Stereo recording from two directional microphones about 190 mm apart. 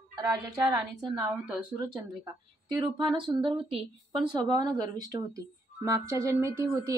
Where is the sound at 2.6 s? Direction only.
25° right (ahead or behind).